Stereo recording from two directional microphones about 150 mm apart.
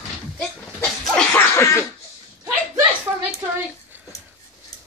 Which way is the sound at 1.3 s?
15° left (ahead or behind).